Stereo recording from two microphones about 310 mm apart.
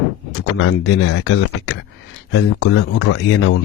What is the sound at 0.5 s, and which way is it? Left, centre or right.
Speech, left.